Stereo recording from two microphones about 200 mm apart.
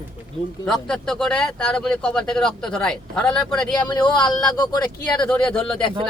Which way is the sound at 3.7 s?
20° left (ahead or behind).